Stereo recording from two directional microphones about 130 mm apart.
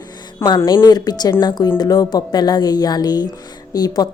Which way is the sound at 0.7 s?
30° left (ahead or behind).